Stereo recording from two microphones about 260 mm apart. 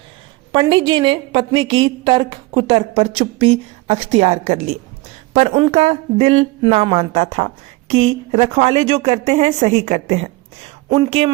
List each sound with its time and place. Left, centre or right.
0.5 s speech: centre